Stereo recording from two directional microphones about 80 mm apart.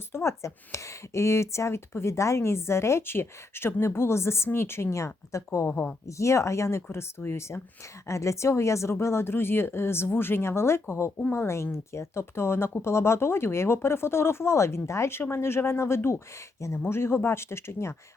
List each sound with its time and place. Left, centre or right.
0.1 s speech: left